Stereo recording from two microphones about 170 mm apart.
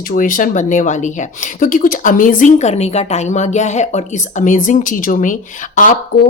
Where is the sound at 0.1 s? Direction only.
50° left (ahead or behind).